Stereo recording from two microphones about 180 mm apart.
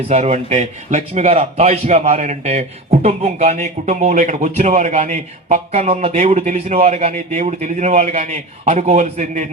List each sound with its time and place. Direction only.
0.1 s a man's voice: 40° right (ahead or behind)